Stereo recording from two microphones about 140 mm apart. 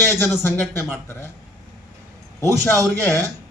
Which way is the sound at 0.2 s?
15° left (ahead or behind).